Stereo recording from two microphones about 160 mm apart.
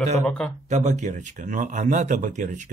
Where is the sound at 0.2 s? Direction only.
5° left (ahead or behind).